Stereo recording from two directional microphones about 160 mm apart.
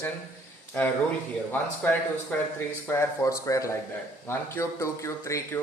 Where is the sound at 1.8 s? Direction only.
10° left (ahead or behind).